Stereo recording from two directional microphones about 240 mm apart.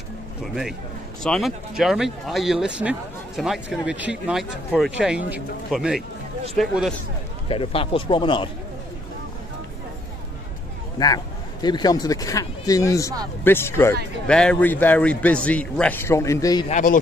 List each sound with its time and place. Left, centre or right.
1.2 s speech: centre
7.4 s speech: left
11.6 s speech: centre
16.6 s speech: left